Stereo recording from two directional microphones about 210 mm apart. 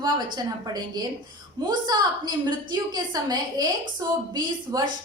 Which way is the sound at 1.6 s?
20° right (ahead or behind).